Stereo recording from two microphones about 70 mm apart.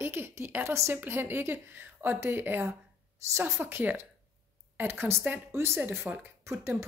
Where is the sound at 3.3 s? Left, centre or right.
Right.